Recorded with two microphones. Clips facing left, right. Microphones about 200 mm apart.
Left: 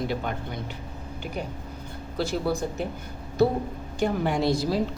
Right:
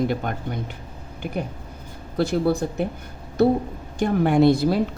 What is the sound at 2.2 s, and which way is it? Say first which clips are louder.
Speech: right 6 dB; 55° right (ahead or behind).